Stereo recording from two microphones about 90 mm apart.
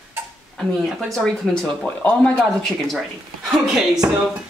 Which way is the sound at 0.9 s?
Centre (ahead or behind).